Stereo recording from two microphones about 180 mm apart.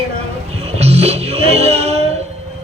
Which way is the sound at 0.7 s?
35° right (ahead or behind).